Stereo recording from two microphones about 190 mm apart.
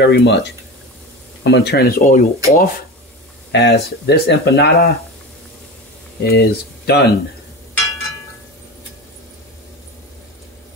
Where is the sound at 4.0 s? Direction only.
60° left (ahead or behind).